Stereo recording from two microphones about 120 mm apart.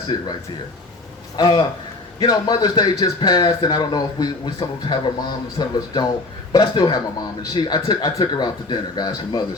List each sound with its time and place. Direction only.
1.4 s speech: 35° left (ahead or behind)